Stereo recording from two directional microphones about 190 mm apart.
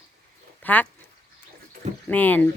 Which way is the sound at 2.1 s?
10° left (ahead or behind).